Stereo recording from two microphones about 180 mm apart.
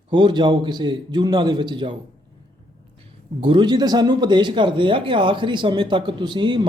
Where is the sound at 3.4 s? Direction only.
25° right (ahead or behind).